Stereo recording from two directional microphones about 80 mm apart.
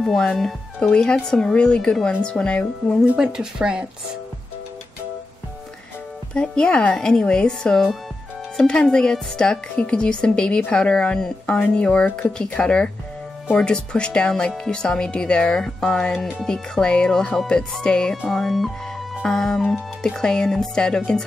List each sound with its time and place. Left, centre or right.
0.0 s speech: centre
3.1 s speech: centre
6.3 s speech: centre